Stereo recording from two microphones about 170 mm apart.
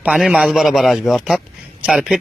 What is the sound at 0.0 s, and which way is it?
Speech, 5° right (ahead or behind).